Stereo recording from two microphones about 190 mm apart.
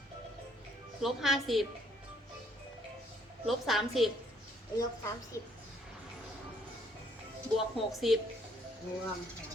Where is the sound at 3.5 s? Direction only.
Centre (ahead or behind).